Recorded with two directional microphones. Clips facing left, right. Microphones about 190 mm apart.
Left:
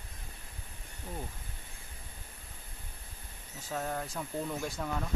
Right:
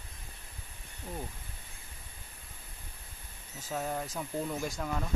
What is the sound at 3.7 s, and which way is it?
Speech, 5° right (ahead or behind).